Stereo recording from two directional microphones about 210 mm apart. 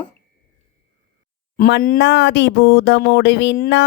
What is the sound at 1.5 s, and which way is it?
Speech, 40° left (ahead or behind).